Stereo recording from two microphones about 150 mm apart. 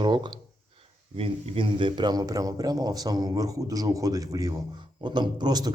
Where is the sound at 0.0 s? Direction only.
30° right (ahead or behind).